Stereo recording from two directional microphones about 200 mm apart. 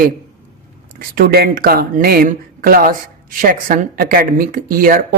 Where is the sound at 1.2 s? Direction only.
50° right (ahead or behind).